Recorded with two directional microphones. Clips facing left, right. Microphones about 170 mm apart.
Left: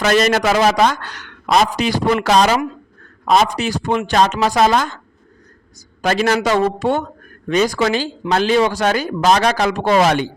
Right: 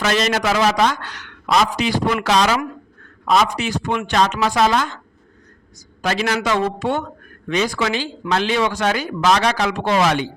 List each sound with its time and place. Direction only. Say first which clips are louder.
0.0 s a man's voice: left 4 dB; 45° left (ahead or behind)
6.0 s a man's voice: left 4 dB; 45° left (ahead or behind)